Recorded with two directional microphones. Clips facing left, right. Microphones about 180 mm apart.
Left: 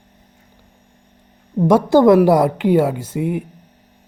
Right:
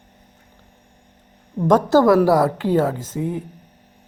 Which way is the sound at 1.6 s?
10° left (ahead or behind).